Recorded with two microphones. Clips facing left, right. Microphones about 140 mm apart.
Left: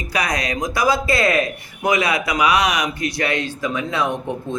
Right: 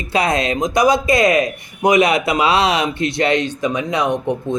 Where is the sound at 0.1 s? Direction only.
25° right (ahead or behind).